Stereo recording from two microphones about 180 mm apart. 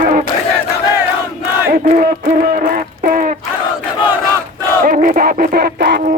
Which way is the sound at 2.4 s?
50° right (ahead or behind).